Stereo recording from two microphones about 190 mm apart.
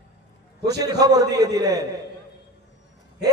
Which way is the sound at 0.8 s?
20° right (ahead or behind).